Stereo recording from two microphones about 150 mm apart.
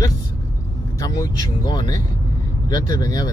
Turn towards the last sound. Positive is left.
turn(degrees=25)  # may be behind; listen again after turning